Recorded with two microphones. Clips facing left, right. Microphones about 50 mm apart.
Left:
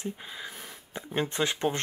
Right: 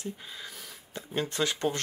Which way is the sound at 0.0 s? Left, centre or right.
Centre.